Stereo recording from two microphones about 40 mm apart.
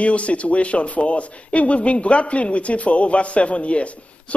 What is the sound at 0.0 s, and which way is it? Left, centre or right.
A man's voice, left.